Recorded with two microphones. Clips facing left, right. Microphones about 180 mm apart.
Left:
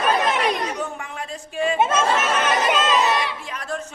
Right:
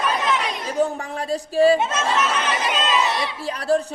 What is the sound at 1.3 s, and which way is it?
Speech, 35° right (ahead or behind).